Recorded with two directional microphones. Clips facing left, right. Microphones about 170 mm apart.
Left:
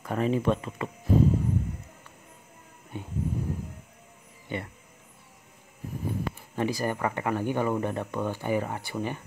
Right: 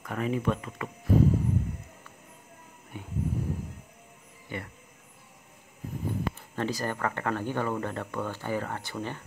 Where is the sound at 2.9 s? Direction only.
30° left (ahead or behind).